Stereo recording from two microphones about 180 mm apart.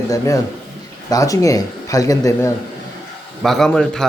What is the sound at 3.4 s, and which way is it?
Speech, centre (ahead or behind).